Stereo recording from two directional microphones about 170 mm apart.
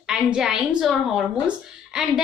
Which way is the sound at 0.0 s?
5° right (ahead or behind).